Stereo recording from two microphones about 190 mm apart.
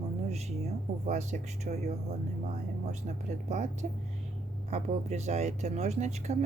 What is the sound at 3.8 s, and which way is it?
Speech, 40° right (ahead or behind).